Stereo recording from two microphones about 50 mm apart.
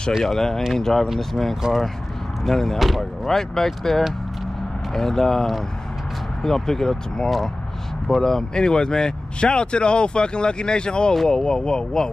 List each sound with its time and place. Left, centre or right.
0.2 s speech: centre
1.0 s speech: centre